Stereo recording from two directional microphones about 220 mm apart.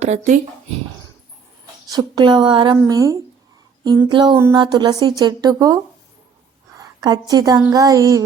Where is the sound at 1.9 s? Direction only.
20° right (ahead or behind).